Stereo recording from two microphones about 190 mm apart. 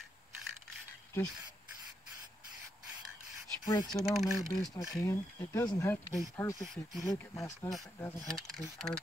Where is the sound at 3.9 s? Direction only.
15° left (ahead or behind).